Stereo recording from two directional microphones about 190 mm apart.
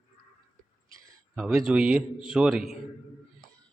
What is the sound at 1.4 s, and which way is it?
A man's voice, 5° right (ahead or behind).